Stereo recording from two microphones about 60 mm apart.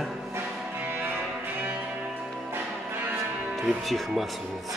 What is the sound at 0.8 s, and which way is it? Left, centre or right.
Music, right.